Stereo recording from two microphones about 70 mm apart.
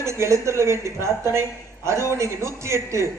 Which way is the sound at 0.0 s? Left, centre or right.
Right.